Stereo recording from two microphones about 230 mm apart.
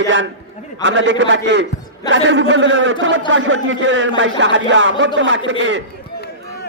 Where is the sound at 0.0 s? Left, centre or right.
Right.